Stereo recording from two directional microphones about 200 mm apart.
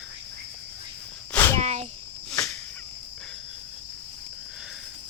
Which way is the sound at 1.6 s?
35° right (ahead or behind).